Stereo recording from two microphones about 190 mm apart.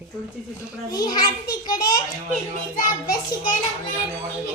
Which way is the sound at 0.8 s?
20° left (ahead or behind).